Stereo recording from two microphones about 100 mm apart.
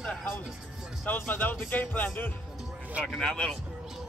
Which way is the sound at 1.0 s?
20° left (ahead or behind).